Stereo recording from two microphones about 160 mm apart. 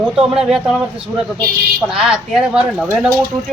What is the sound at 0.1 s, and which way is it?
Speech, 5° right (ahead or behind).